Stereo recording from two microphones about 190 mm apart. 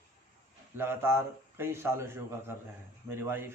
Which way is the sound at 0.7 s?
10° right (ahead or behind).